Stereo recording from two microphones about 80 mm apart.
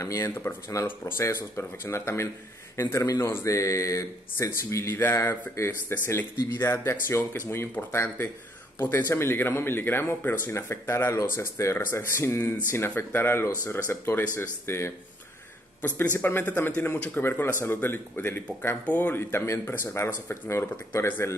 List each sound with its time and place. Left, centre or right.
0.0 s speech: left
0.3 s speech: left
14.7 s speech: left
16.2 s speech: left